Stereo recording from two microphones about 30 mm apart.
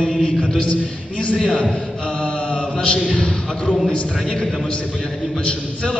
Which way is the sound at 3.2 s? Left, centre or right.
Left.